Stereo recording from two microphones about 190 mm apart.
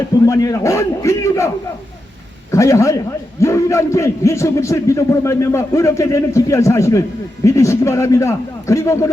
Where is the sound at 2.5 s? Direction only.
15° left (ahead or behind).